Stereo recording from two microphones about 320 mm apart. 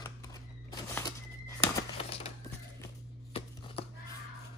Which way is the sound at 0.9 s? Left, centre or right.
Centre.